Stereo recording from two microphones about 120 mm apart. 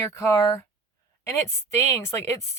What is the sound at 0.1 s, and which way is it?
Speech, 25° left (ahead or behind).